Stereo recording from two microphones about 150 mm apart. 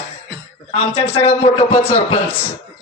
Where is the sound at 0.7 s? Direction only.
40° left (ahead or behind).